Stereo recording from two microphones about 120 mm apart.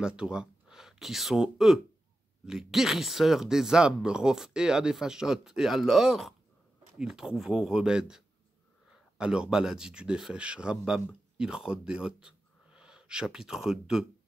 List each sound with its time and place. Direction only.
0.0 s speech: 5° right (ahead or behind)
9.2 s speech: 5° right (ahead or behind)